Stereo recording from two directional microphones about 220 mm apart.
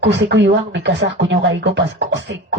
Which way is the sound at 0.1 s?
55° right (ahead or behind).